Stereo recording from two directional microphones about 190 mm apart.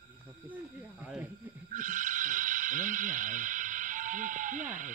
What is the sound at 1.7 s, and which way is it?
Speech, 45° right (ahead or behind).